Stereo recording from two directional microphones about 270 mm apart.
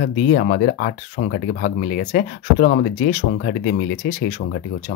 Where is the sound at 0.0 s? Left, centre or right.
Left.